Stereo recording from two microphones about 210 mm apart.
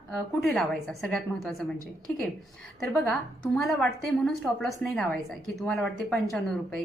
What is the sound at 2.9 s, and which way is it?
A woman's voice, centre (ahead or behind).